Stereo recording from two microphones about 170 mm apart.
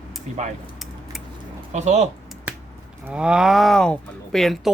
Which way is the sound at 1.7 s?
40° right (ahead or behind).